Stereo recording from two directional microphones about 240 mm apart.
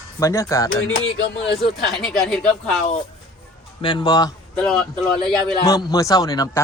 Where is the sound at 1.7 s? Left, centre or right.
Centre.